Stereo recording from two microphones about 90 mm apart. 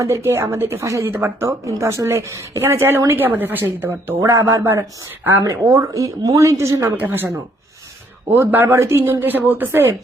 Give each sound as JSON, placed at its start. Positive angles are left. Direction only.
{"t": 0.0, "sound": "speech", "side_deg": -30}
{"t": 4.2, "sound": "a woman's voice", "side_deg": -30}
{"t": 5.2, "sound": "speech", "side_deg": -20}
{"t": 5.5, "sound": "a woman's voice", "side_deg": -35}
{"t": 8.3, "sound": "speech", "side_deg": -20}